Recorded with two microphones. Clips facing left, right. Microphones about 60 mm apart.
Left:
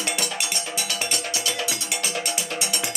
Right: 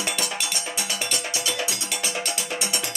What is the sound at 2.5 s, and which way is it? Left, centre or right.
Music, right.